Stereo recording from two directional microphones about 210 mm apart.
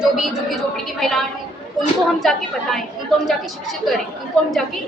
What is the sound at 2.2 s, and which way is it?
Speech, centre (ahead or behind).